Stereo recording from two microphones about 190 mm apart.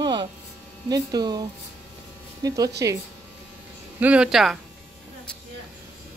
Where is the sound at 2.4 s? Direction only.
20° right (ahead or behind).